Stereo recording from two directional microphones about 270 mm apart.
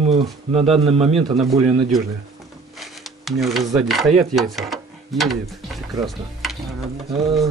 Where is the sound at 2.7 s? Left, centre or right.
Centre.